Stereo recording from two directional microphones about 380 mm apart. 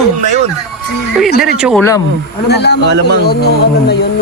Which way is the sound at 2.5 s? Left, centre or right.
Left.